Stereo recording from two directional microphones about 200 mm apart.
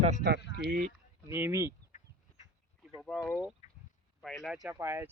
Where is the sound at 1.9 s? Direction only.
40° left (ahead or behind).